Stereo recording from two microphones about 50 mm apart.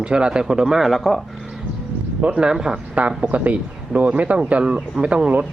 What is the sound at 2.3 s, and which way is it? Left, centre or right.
Speech, centre.